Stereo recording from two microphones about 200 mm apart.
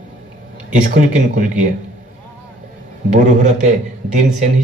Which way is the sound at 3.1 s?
35° right (ahead or behind).